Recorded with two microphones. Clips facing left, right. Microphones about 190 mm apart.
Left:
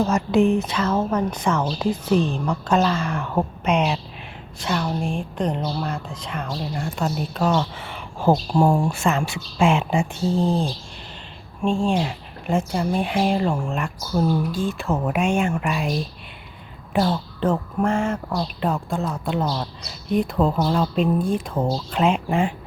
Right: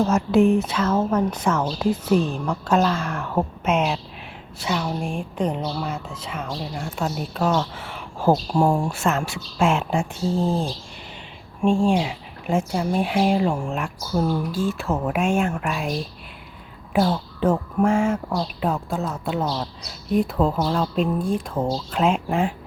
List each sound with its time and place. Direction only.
0.0 s a woman's voice: 5° right (ahead or behind)